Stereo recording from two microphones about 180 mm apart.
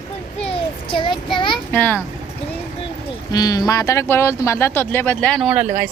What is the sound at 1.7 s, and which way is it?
Speech, 10° left (ahead or behind).